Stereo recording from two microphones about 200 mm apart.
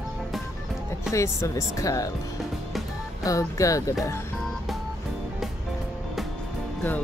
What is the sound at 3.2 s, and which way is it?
Speech, 15° left (ahead or behind).